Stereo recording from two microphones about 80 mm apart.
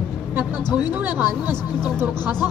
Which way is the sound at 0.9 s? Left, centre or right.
Right.